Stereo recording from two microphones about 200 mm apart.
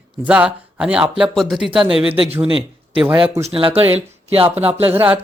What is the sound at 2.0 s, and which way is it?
A man's voice, 30° right (ahead or behind).